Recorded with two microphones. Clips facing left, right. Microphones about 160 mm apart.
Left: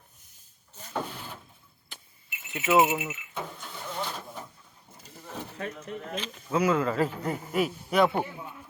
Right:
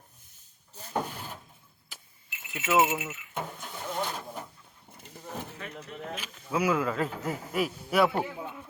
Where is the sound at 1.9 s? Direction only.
5° right (ahead or behind).